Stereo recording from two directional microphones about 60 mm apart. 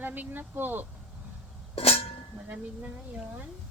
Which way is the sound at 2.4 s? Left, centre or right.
Right.